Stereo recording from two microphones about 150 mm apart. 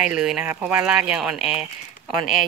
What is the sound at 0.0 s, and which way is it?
Speech, 5° right (ahead or behind).